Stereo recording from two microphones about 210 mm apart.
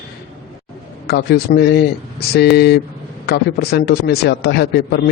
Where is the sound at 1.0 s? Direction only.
50° left (ahead or behind).